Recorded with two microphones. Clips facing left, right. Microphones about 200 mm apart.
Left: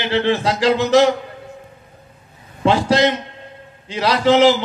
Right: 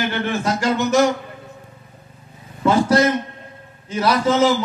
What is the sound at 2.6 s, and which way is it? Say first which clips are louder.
Speech: even; 90° left.